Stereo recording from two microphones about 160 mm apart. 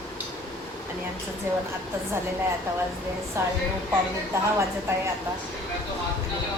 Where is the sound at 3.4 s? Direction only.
15° right (ahead or behind).